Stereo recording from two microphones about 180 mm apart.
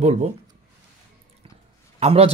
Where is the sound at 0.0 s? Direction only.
40° right (ahead or behind).